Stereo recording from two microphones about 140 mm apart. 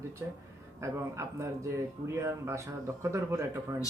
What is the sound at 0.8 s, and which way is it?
Speech, 20° right (ahead or behind).